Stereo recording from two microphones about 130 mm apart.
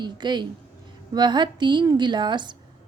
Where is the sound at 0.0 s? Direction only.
35° right (ahead or behind).